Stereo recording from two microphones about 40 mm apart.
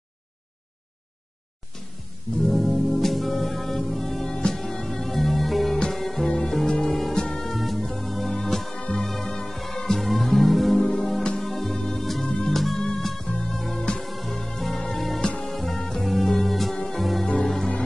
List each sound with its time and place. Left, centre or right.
2.3 s music: centre